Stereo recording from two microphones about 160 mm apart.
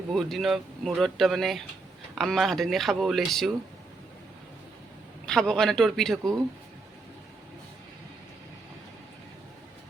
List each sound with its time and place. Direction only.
0.1 s speech: centre (ahead or behind)
5.2 s speech: 5° left (ahead or behind)